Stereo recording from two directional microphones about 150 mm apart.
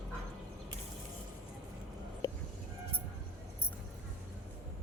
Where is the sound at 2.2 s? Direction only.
25° left (ahead or behind).